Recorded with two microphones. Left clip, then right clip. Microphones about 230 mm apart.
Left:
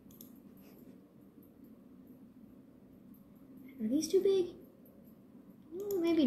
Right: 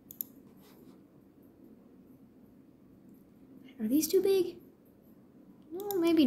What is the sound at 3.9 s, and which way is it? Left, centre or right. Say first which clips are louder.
Speech: right 3 dB; right.